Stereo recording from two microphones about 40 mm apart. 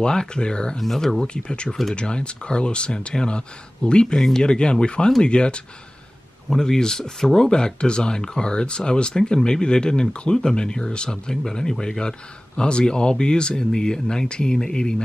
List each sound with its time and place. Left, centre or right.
0.0 s speech: left
0.7 s speech: centre
1.2 s speech: left
6.5 s speech: centre